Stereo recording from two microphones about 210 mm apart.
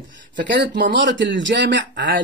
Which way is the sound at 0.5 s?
55° right (ahead or behind).